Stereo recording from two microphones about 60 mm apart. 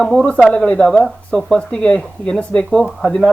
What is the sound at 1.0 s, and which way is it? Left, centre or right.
Speech, centre.